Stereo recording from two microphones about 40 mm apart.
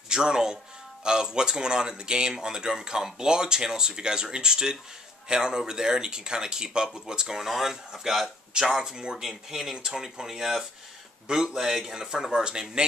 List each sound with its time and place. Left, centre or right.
0.1 s speech: centre
9.3 s speech: centre